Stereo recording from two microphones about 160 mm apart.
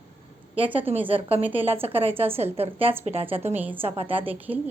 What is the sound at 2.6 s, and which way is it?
Speech, 35° right (ahead or behind).